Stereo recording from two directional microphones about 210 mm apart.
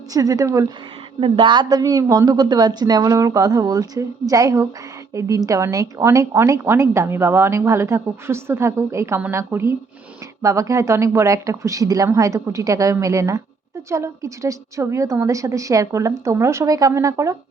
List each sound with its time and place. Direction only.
0.1 s a woman's voice: 15° right (ahead or behind)